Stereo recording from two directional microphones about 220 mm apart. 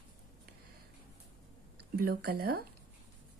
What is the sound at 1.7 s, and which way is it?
Speech, 45° right (ahead or behind).